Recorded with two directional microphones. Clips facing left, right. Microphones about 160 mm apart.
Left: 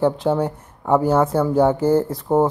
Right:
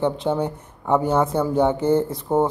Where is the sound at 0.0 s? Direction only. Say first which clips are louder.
Left 3 dB; 5° left (ahead or behind).